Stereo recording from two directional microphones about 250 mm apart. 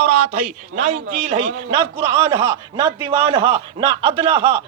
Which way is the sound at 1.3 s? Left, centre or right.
Right.